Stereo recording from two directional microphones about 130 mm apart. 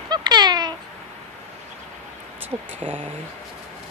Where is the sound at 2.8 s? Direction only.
40° right (ahead or behind).